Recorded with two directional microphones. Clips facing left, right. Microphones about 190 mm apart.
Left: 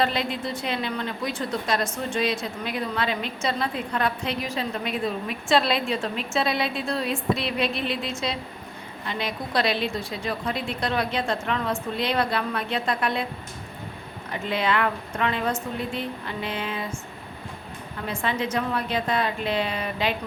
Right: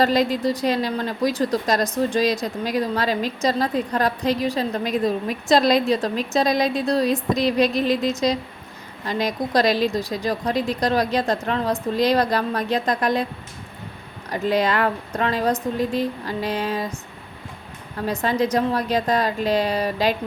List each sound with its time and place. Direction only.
0.0 s a woman's voice: 40° right (ahead or behind)
14.3 s a woman's voice: 40° right (ahead or behind)
18.0 s a woman's voice: 40° right (ahead or behind)